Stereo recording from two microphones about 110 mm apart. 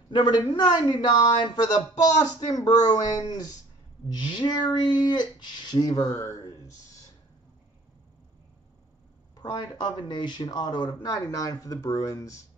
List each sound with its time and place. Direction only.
0.1 s a man's voice: 40° left (ahead or behind)
9.4 s a man's voice: 45° left (ahead or behind)
10.9 s a man's voice: 30° left (ahead or behind)